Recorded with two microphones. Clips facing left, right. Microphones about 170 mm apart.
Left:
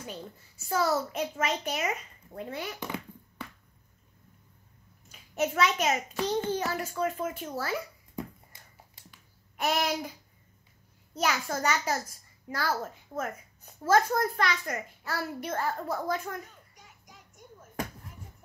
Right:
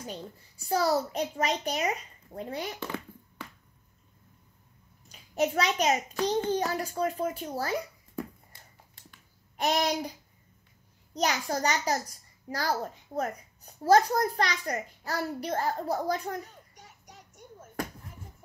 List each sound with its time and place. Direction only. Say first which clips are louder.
0.0 s a child's voice: right 1 dB; 35° right (ahead or behind)
2.8 s a sound: even; 15° left (ahead or behind)
5.3 s a child's voice: even; 35° right (ahead or behind)
9.6 s a child's voice: right 2 dB; 35° right (ahead or behind)
11.1 s a child's voice: right 1 dB; 35° right (ahead or behind)